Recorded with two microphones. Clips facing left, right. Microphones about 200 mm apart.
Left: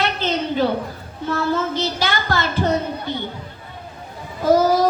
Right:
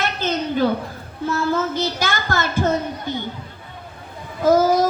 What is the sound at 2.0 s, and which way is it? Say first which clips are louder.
Speech: left 1 dB; 50° right (ahead or behind).